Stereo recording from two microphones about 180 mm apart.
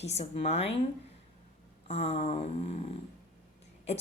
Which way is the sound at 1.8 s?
35° left (ahead or behind).